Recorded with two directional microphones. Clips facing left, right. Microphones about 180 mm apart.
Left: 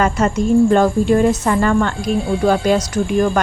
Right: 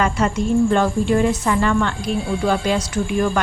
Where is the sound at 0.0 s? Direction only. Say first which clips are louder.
Left 3 dB; 45° left (ahead or behind).